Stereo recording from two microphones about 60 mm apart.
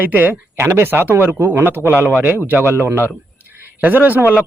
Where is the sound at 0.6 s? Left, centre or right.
Right.